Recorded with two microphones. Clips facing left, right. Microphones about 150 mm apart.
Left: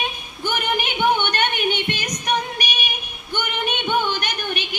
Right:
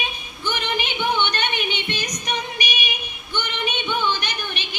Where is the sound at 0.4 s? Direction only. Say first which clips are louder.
Left 2 dB; 50° left (ahead or behind).